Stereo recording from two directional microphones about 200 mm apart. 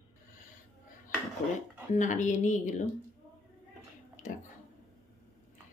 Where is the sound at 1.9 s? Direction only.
40° left (ahead or behind).